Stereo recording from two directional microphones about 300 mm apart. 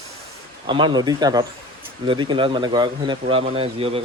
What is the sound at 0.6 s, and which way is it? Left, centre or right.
Speech, centre.